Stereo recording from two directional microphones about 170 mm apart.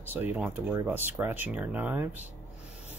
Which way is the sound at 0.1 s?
10° right (ahead or behind).